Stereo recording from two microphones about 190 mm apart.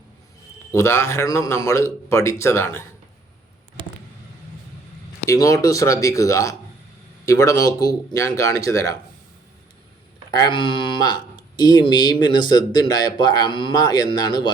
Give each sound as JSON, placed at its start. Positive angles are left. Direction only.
{"t": 0.7, "sound": "speech", "side_deg": 15}
{"t": 5.3, "sound": "speech", "side_deg": 15}
{"t": 10.3, "sound": "speech", "side_deg": 25}